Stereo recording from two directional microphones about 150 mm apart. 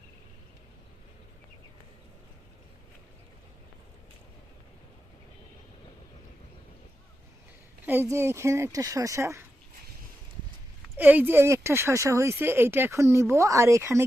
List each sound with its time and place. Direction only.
7.9 s speech: 15° right (ahead or behind)
10.9 s speech: 10° right (ahead or behind)